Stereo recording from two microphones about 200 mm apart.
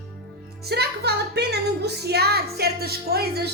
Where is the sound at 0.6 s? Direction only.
55° right (ahead or behind).